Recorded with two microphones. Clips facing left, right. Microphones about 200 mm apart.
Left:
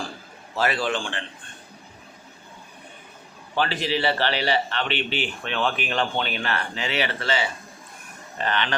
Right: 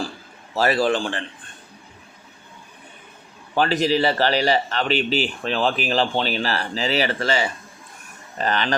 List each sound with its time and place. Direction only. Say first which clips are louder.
0.5 s a man's voice: right 5 dB; 40° right (ahead or behind)
3.5 s a man's voice: right 5 dB; 45° right (ahead or behind)